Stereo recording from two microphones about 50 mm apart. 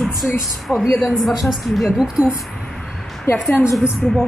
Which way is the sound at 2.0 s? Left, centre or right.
Centre.